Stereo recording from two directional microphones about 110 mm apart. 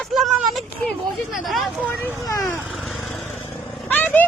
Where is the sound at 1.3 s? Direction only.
Centre (ahead or behind).